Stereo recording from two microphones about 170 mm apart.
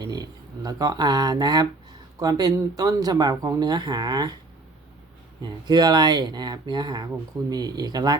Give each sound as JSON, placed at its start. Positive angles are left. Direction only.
{"t": 0.0, "sound": "speech", "side_deg": -25}
{"t": 5.4, "sound": "speech", "side_deg": -25}